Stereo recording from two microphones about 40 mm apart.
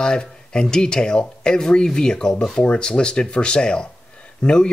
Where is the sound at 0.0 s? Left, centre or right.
Centre.